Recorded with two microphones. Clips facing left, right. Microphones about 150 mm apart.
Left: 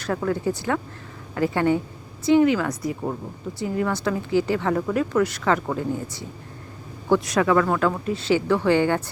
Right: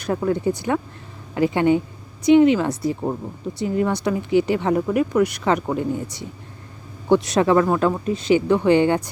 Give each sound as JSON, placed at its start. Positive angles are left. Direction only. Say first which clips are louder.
{"t": 0.0, "sound": "a woman's voice", "louder": "right 3 dB", "side_deg": -15}